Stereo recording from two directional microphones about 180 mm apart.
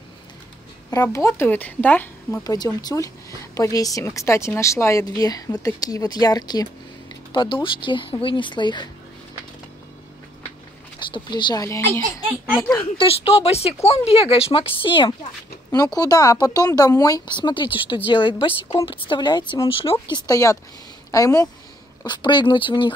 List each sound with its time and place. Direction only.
0.8 s a woman's voice: 15° left (ahead or behind)
2.4 s a woman's voice: 20° left (ahead or behind)
11.0 s speech: 25° left (ahead or behind)
12.9 s speech: 30° left (ahead or behind)